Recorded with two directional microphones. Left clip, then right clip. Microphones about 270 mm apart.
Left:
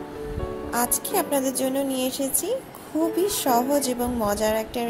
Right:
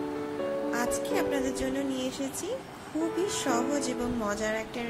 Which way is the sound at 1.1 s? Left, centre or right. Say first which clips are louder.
Left 5 dB; centre.